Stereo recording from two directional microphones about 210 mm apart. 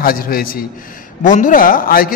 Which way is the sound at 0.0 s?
45° left (ahead or behind).